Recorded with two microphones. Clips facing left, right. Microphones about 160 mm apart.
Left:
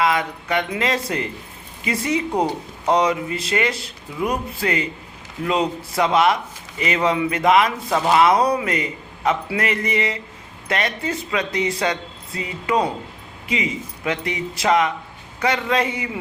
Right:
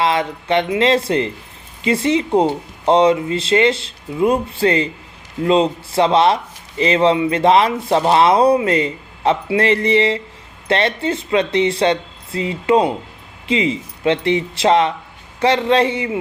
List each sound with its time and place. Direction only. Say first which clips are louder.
0.0 s speech: right 2 dB; 30° right (ahead or behind)